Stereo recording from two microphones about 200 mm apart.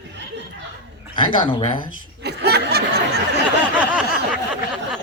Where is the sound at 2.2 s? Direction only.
55° right (ahead or behind).